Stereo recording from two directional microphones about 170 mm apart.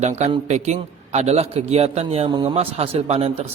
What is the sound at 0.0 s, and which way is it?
A man's voice, 40° right (ahead or behind).